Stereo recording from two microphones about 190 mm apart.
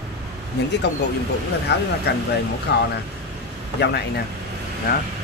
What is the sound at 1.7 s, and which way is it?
Speech, 60° left (ahead or behind).